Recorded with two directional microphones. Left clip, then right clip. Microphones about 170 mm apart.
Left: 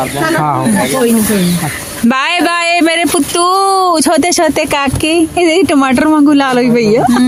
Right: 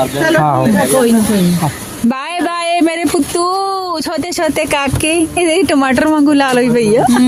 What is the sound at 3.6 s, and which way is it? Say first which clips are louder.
Speech: left 8 dB; 35° left (ahead or behind).